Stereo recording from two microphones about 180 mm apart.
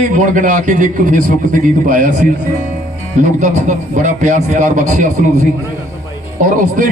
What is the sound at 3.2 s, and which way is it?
A man's voice, 45° right (ahead or behind).